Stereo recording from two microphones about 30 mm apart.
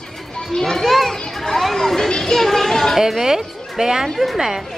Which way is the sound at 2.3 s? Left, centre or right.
Centre.